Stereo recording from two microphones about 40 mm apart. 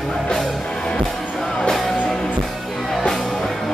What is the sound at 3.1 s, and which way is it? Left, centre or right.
Music, centre.